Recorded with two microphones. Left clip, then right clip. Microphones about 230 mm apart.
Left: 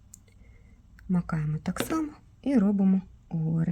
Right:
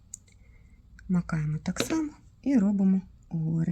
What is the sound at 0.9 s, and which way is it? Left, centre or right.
Speech, centre.